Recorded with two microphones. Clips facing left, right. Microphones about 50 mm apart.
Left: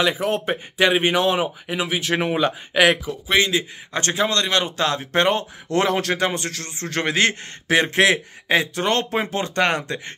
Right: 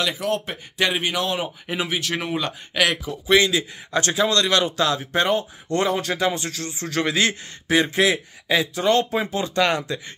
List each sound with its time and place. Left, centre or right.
0.0 s a man's voice: left
1.7 s speech: centre
2.0 s speech: centre
3.3 s a man's voice: left
5.7 s a man's voice: left
7.6 s speech: left
8.5 s a man's voice: left